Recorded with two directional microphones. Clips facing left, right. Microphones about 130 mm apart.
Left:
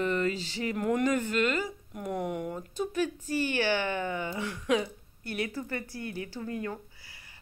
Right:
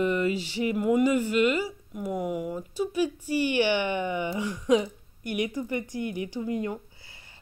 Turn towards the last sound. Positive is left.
turn(degrees=-25)  # may be behind; listen again after turning